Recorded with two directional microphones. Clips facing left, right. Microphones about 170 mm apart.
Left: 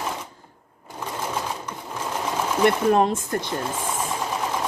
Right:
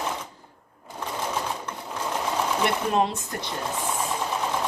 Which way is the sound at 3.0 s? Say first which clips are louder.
Left 4 dB; 50° left (ahead or behind).